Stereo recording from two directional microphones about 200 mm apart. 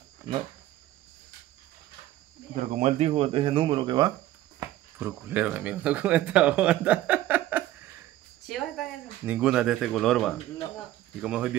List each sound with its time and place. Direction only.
2.5 s speech: 40° right (ahead or behind); by 4.1 s 20° right (ahead or behind)
4.6 s speech: 10° right (ahead or behind)
8.5 s cricket: centre (ahead or behind)
9.2 s speech: 10° right (ahead or behind)